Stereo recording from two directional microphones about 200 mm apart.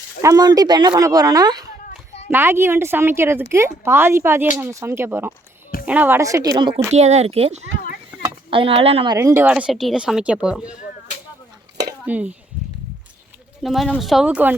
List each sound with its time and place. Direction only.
0.2 s speech: 15° right (ahead or behind)
6.9 s speech: 35° right (ahead or behind)
9.1 s speech: 15° right (ahead or behind)
12.0 s speech: 5° right (ahead or behind)
13.6 s speech: centre (ahead or behind)